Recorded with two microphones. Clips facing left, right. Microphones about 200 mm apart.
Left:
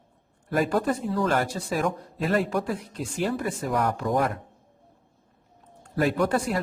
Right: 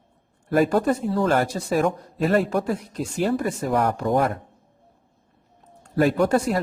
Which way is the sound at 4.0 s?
30° right (ahead or behind).